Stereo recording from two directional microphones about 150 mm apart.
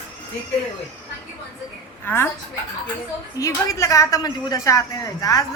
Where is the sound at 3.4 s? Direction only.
20° left (ahead or behind).